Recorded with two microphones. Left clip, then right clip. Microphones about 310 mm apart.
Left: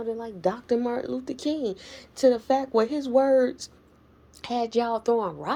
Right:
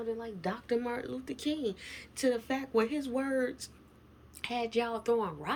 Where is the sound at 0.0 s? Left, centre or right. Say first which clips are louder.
Left 9 dB; left.